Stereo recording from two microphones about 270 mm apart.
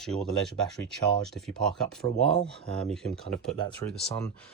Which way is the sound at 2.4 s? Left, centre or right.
Centre.